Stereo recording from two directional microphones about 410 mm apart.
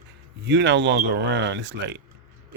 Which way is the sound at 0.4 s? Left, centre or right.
Right.